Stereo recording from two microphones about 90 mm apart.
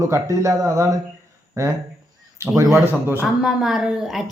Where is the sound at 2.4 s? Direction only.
35° right (ahead or behind).